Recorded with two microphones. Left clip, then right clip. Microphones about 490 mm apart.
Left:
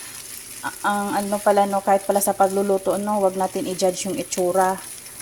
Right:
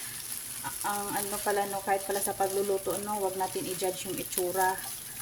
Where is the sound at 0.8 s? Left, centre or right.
Right.